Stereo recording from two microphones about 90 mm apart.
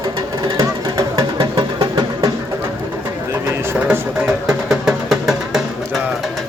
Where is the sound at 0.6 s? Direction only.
50° right (ahead or behind).